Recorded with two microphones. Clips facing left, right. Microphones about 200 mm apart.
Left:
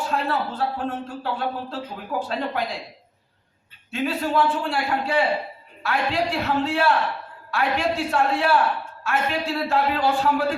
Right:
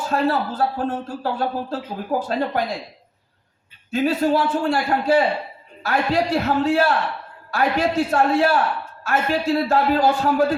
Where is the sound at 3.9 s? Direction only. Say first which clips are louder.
Right 4 dB; 40° right (ahead or behind).